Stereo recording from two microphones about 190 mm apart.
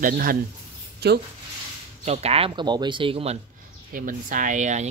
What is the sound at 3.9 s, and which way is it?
Speech, 45° right (ahead or behind).